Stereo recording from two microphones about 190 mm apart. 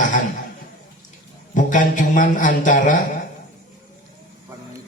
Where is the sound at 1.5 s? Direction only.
45° left (ahead or behind).